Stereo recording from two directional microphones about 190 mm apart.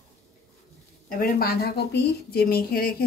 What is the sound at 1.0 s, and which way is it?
Speech, 50° left (ahead or behind).